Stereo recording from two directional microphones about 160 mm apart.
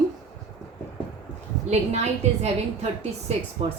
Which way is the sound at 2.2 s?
40° right (ahead or behind).